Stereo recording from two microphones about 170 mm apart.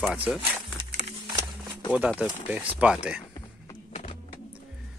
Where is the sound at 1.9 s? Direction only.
10° right (ahead or behind).